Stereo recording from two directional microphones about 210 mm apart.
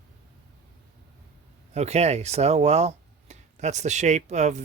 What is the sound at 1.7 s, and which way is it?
Speech, 30° right (ahead or behind).